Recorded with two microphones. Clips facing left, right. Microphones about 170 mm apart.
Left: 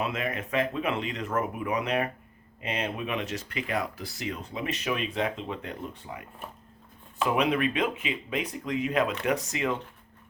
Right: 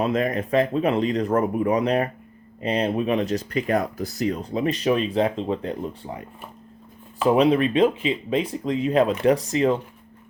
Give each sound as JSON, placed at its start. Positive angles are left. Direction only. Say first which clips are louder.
{"t": 0.0, "sound": "speech", "louder": "right 8 dB", "side_deg": -40}
{"t": 7.3, "sound": "speech", "louder": "right 8 dB", "side_deg": -30}